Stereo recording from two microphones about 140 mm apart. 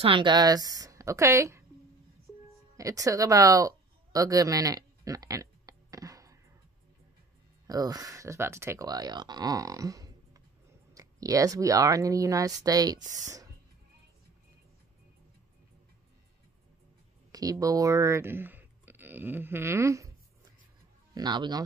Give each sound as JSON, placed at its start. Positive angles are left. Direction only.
{"t": 0.0, "sound": "speech", "side_deg": -35}
{"t": 2.8, "sound": "a sound", "side_deg": -25}
{"t": 7.6, "sound": "speech", "side_deg": -25}
{"t": 17.3, "sound": "speech", "side_deg": -25}
{"t": 21.1, "sound": "speech", "side_deg": -30}